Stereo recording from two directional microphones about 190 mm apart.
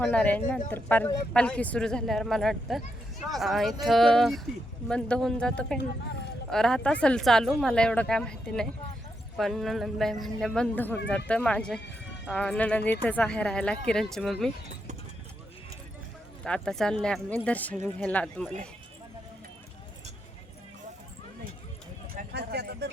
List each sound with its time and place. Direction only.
0.0 s speech: 5° left (ahead or behind)
16.4 s speech: 5° left (ahead or behind)
22.3 s a sound: 60° right (ahead or behind)